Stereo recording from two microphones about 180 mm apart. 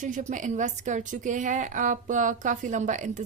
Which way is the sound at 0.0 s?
45° right (ahead or behind).